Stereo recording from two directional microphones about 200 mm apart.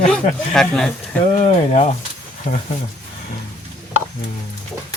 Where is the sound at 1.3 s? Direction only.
35° left (ahead or behind).